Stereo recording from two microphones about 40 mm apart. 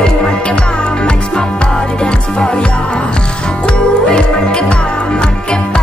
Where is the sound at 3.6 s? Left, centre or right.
Left.